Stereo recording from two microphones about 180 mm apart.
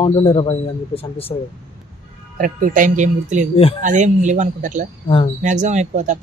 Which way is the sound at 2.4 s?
50° right (ahead or behind).